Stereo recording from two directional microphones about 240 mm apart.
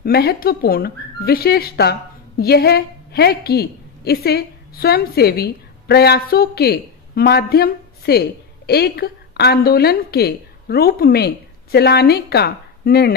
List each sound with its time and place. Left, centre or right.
0.0 s speech: left